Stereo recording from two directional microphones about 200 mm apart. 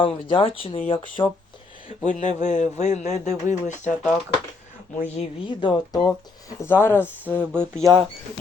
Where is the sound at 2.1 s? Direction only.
40° left (ahead or behind).